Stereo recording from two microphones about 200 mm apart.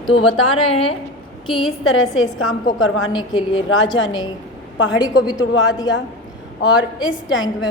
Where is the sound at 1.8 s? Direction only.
85° left.